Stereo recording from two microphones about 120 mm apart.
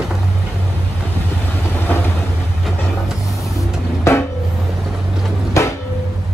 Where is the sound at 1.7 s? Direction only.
15° left (ahead or behind).